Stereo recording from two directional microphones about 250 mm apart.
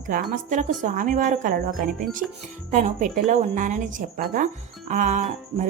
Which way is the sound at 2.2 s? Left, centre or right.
Centre.